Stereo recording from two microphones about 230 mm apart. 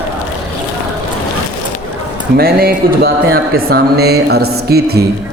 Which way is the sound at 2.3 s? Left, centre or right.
Right.